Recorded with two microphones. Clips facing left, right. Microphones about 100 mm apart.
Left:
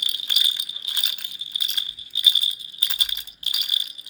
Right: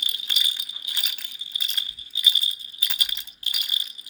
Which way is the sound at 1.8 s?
20° left (ahead or behind).